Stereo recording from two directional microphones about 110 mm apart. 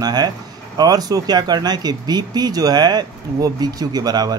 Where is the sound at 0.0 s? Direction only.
35° right (ahead or behind).